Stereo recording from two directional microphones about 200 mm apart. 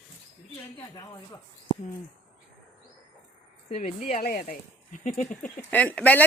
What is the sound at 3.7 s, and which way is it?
Speech, 35° left (ahead or behind).